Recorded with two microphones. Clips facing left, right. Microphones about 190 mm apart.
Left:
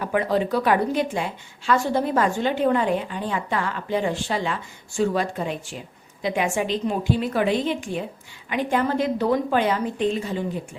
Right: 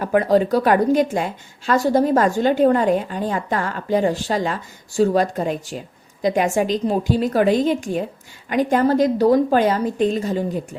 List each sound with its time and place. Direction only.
0.0 s a woman's voice: 45° right (ahead or behind)